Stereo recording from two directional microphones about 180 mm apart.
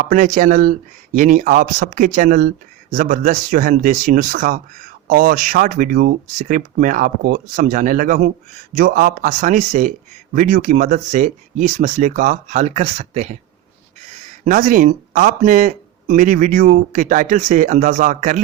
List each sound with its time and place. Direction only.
0.0 s speech: 50° right (ahead or behind)